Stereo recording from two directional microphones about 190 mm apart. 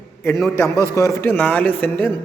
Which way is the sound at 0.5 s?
15° right (ahead or behind).